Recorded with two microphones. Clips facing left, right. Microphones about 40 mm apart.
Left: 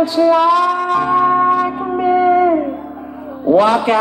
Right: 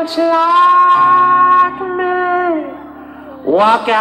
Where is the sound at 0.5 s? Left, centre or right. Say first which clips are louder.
Right 7 dB; right.